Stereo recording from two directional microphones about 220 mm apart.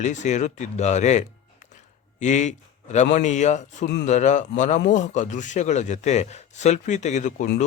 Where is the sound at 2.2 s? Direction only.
35° left (ahead or behind).